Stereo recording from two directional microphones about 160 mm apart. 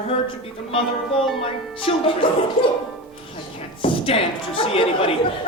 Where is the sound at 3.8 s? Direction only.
35° left (ahead or behind).